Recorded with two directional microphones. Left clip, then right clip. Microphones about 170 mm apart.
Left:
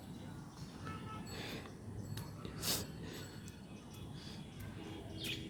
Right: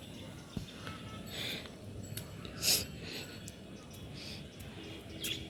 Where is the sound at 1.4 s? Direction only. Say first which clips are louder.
Right 7 dB; 15° left (ahead or behind).